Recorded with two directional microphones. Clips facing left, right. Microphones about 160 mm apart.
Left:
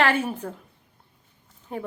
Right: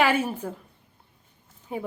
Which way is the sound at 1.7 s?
5° right (ahead or behind).